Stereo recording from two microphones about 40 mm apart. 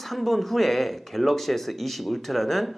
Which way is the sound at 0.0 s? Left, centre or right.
Centre.